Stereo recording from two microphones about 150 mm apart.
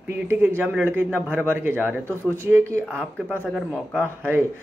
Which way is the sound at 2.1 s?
15° left (ahead or behind).